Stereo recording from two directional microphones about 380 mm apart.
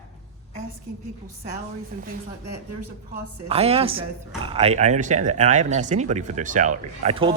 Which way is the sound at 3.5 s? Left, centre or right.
Centre.